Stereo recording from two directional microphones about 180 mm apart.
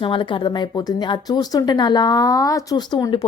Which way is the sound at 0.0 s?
30° left (ahead or behind).